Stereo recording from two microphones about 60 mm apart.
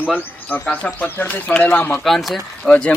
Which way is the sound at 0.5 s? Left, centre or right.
Left.